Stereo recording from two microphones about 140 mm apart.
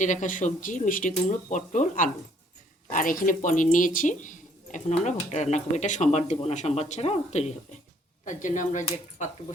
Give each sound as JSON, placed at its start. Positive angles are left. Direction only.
{"t": 0.0, "sound": "speech", "side_deg": 60}
{"t": 2.9, "sound": "speech", "side_deg": 75}
{"t": 8.2, "sound": "speech", "side_deg": 65}